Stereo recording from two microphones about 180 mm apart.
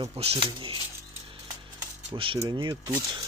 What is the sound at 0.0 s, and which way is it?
Speech, 35° right (ahead or behind).